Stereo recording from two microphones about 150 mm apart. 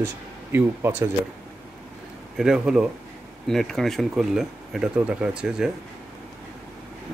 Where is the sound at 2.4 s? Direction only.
5° right (ahead or behind).